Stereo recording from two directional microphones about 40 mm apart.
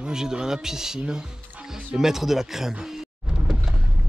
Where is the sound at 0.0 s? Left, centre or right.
Centre.